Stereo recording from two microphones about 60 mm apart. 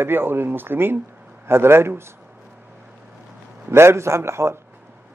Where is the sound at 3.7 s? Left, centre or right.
Right.